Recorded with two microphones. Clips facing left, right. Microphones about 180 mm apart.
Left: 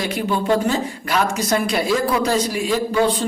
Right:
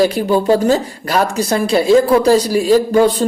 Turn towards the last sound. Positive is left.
turn(degrees=-40)  # may be behind; listen again after turning